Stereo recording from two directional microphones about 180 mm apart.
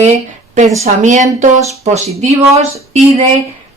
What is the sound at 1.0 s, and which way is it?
Speech, 45° right (ahead or behind).